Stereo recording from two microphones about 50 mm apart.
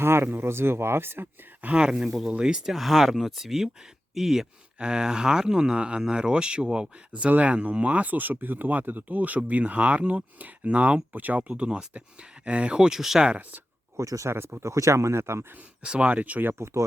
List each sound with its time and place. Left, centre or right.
0.0 s speech: right
1.7 s speech: centre
2.0 s speech: centre
4.8 s speech: centre
7.1 s speech: right
11.4 s speech: right
13.2 s speech: right
13.9 s speech: right
14.3 s speech: right
14.6 s speech: right
15.8 s speech: centre
16.0 s speech: right